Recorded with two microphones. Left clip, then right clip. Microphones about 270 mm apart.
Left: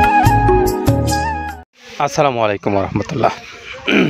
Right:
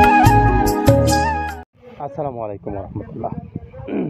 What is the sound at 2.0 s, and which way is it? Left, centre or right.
Speech, left.